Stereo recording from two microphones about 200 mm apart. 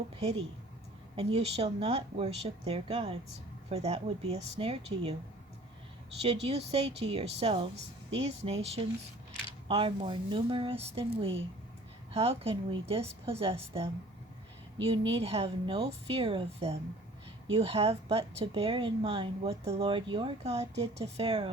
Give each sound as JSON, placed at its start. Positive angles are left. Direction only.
{"t": 0.2, "sound": "a woman's voice", "side_deg": -30}
{"t": 6.2, "sound": "a woman's voice", "side_deg": -30}
{"t": 15.1, "sound": "a woman's voice", "side_deg": -30}